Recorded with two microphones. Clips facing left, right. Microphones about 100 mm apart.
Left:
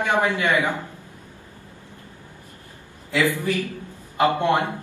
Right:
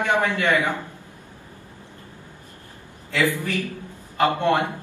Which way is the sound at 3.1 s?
15° left (ahead or behind).